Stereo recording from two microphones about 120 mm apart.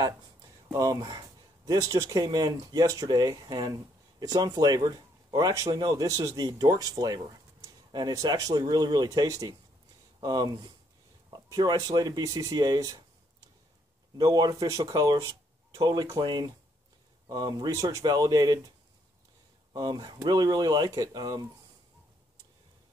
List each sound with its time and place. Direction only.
0.7 s speech: 30° right (ahead or behind)
14.1 s speech: 35° right (ahead or behind)
19.7 s speech: 35° right (ahead or behind)